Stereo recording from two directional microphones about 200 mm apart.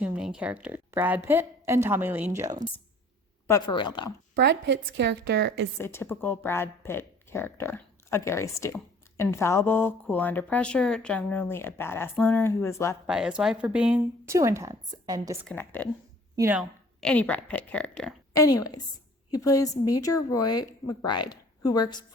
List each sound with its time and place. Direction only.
0.0 s a woman's voice: 5° right (ahead or behind)
3.7 s speech: 25° left (ahead or behind)
4.4 s a woman's voice: 60° right (ahead or behind)
5.7 s speech: 10° left (ahead or behind)
13.1 s a woman's voice: 5° right (ahead or behind)
15.4 s speech: 10° left (ahead or behind)
16.3 s speech: 15° right (ahead or behind)
16.6 s speech: 5° left (ahead or behind)
18.3 s speech: 20° left (ahead or behind)